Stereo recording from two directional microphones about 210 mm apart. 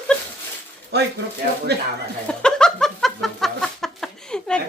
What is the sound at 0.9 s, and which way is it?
Speech, 50° right (ahead or behind).